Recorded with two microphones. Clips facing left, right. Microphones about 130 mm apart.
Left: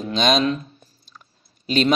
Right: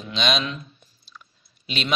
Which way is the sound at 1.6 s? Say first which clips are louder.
Left 11 dB; 40° left (ahead or behind).